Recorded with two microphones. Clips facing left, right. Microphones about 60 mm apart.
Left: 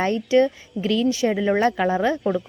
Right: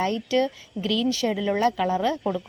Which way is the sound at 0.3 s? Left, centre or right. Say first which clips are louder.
Left 6 dB; left.